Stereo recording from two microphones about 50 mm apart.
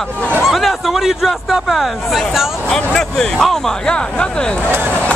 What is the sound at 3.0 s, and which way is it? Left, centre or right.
Speech, centre.